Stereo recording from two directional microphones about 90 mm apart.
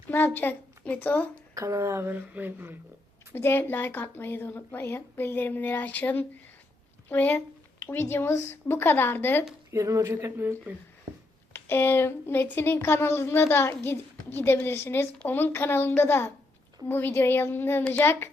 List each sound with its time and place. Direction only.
0.1 s a woman's voice: 25° left (ahead or behind)
1.5 s speech: 35° right (ahead or behind)
3.3 s speech: 25° left (ahead or behind)
9.7 s speech: 35° right (ahead or behind)
11.5 s speech: 25° left (ahead or behind)